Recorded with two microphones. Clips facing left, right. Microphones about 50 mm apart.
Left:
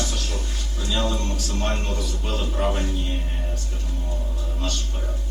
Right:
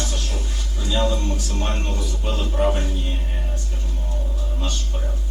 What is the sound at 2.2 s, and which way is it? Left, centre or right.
Speech, centre.